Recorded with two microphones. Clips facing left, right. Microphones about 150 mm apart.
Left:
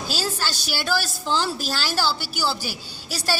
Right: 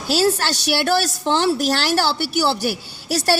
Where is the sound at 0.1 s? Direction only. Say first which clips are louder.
Right 12 dB; 70° right (ahead or behind).